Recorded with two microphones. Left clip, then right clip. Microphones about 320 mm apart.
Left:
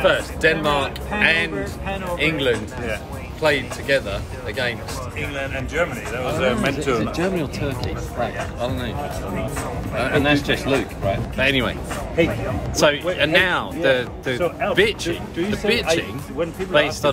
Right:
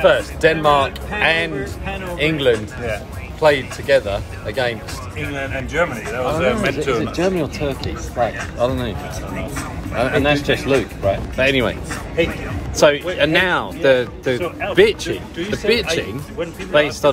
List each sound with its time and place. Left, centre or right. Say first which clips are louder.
0.0 s speech: right 4 dB; centre
5.3 s speech: right 4 dB; centre
6.4 s speech: right 1 dB; centre
7.0 s speech: right 3 dB; centre
9.9 s speech: right 2 dB; centre
12.2 s speech: even; centre
12.7 s speech: right 4 dB; centre